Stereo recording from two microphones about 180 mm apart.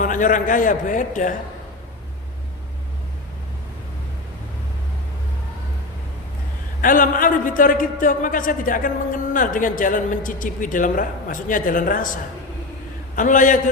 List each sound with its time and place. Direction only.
0.0 s a man's voice: 45° left (ahead or behind)
6.8 s a man's voice: 50° left (ahead or behind)